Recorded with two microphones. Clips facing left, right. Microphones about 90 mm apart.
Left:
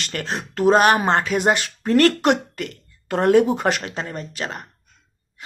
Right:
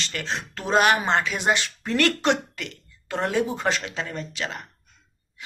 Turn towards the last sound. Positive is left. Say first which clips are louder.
# left 2 dB
turn(degrees=40)  # may be behind; listen again after turning